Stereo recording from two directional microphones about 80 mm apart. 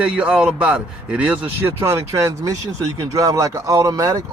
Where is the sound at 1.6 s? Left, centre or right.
Right.